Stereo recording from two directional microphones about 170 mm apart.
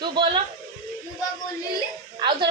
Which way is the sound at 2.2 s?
25° right (ahead or behind).